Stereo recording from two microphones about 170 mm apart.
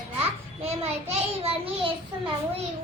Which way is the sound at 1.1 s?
35° right (ahead or behind).